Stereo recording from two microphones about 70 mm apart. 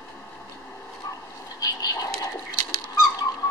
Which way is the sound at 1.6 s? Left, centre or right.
Left.